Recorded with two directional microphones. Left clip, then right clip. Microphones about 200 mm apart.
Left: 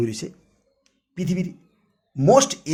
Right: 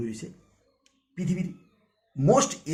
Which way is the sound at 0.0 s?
55° left (ahead or behind).